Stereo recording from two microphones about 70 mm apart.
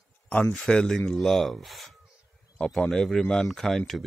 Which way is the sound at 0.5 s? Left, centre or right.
Centre.